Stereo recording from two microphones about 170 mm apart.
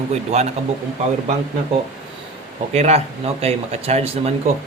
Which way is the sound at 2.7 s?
40° right (ahead or behind).